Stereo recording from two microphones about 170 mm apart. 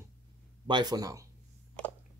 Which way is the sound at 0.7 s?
25° right (ahead or behind).